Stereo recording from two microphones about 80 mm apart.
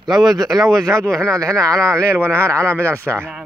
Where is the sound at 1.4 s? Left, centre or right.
Right.